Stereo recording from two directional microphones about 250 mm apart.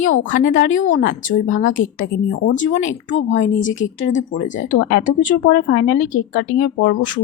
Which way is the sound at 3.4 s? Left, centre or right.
Left.